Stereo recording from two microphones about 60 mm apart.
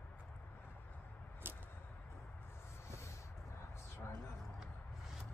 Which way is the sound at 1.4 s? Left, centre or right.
Right.